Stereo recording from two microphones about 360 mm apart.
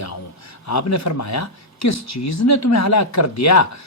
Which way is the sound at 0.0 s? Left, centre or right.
Left.